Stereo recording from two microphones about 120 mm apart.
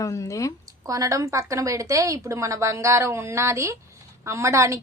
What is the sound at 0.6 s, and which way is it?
A woman's voice, 30° right (ahead or behind).